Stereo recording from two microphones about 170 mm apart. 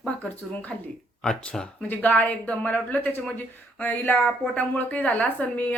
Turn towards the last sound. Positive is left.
turn(degrees=10)  # may be behind; listen again after turning